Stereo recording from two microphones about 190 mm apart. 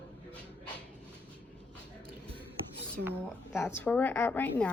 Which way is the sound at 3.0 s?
60° right (ahead or behind).